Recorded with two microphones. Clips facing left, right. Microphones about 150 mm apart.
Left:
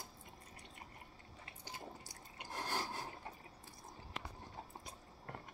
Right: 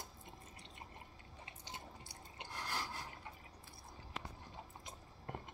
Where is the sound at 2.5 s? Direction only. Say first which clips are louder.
Left 3 dB; 40° left (ahead or behind).